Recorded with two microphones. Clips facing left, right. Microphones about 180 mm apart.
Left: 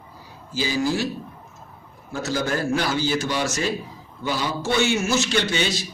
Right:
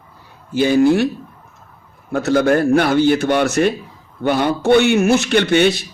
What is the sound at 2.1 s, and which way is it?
Speech, 60° right (ahead or behind).